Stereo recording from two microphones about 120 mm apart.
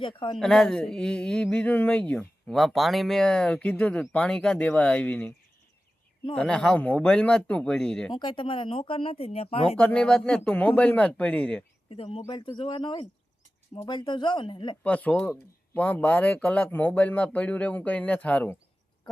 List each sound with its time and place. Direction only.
0.0 s speech: 45° left (ahead or behind)
0.3 s speech: 5° left (ahead or behind)
6.3 s speech: 5° left (ahead or behind)
8.1 s speech: 40° left (ahead or behind)
9.7 s speech: 10° left (ahead or behind)
11.9 s speech: 50° left (ahead or behind)
14.8 s speech: 10° left (ahead or behind)